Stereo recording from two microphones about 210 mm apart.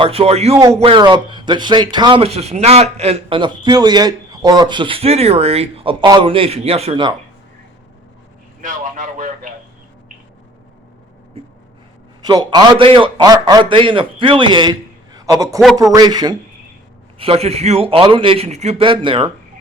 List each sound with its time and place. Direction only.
0.0 s speech: 30° right (ahead or behind)
8.6 s speech: 35° right (ahead or behind)
12.2 s speech: 20° right (ahead or behind)